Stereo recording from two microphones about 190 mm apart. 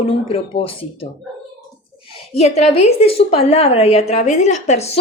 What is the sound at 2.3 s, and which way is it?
A woman's voice, 35° left (ahead or behind).